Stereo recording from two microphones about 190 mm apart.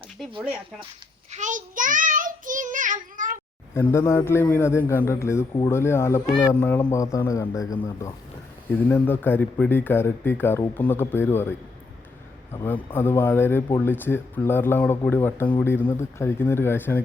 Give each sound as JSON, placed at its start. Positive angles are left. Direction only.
{"t": 1.3, "sound": "child singing", "side_deg": -40}
{"t": 3.8, "sound": "speech", "side_deg": 15}
{"t": 12.6, "sound": "speech", "side_deg": 10}